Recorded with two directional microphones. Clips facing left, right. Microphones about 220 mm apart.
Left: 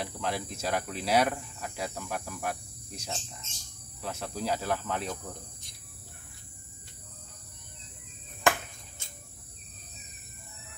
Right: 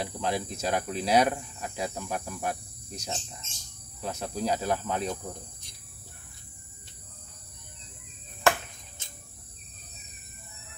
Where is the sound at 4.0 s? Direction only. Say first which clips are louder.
Right 3 dB; 20° right (ahead or behind).